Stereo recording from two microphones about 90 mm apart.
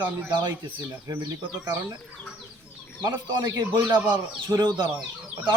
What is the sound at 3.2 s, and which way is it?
Speech, 50° right (ahead or behind).